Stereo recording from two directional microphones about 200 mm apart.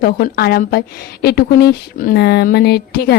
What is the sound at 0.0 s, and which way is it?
A woman's voice, 50° left (ahead or behind).